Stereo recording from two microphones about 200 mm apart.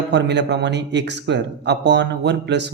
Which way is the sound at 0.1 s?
60° right (ahead or behind).